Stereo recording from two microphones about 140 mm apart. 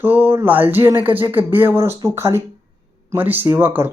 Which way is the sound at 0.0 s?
15° right (ahead or behind).